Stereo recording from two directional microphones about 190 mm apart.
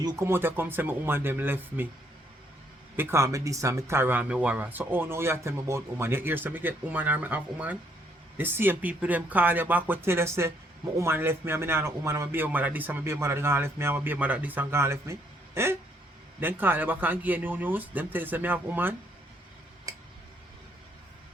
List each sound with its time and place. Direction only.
0.0 s speech: 15° right (ahead or behind)
2.9 s speech: 10° right (ahead or behind)
19.9 s tick-tock: 20° right (ahead or behind)